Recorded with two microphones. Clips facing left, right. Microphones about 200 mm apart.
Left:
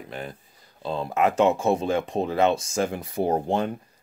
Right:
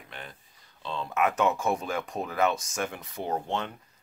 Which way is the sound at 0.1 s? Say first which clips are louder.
Left 8 dB; 40° left (ahead or behind).